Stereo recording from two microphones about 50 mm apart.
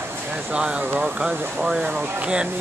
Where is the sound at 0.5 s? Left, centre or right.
Centre.